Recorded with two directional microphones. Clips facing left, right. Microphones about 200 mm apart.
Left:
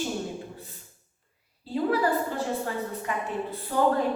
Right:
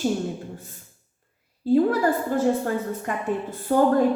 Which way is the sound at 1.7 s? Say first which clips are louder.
Right 5 dB; 50° right (ahead or behind).